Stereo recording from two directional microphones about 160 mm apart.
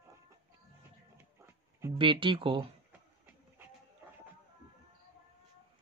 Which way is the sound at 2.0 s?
30° right (ahead or behind).